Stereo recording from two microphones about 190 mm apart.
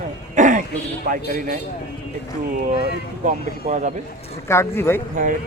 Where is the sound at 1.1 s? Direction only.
45° right (ahead or behind).